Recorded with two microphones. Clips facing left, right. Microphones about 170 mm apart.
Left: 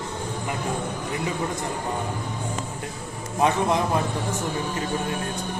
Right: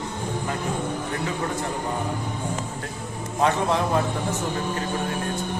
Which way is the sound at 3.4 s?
15° left (ahead or behind).